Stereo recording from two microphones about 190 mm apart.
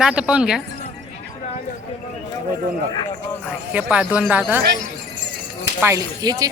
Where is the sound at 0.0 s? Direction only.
5° right (ahead or behind).